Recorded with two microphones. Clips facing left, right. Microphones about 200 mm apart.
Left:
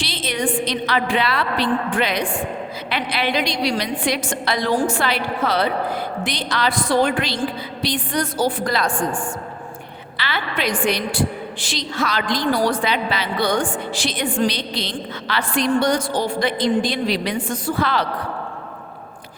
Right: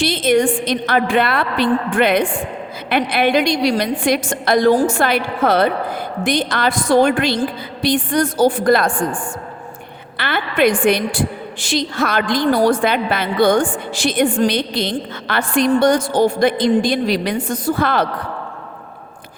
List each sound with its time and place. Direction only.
0.0 s a sound: 50° right (ahead or behind)
0.6 s a woman's voice: 50° right (ahead or behind)
10.2 s a woman's voice: 50° right (ahead or behind)